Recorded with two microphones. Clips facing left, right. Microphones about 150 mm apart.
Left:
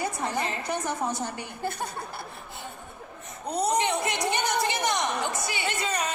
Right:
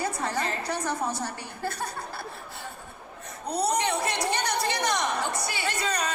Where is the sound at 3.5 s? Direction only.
20° left (ahead or behind).